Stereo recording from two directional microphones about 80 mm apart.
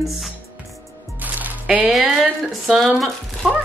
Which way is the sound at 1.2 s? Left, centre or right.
Right.